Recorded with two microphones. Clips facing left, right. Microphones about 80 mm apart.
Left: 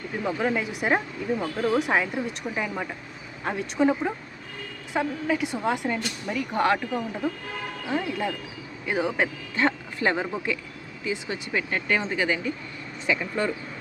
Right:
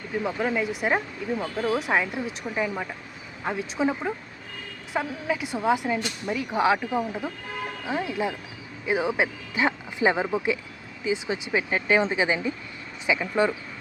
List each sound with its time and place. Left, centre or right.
0.2 s speech: centre